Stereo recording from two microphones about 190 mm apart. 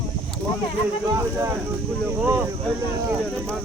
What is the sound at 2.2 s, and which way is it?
Speech, 10° right (ahead or behind).